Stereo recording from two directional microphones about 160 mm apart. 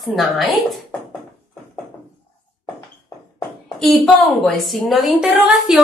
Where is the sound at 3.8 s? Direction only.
Centre (ahead or behind).